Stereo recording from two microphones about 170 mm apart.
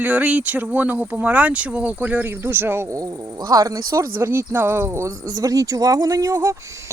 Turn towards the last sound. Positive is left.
turn(degrees=-15)  # may be behind; listen again after turning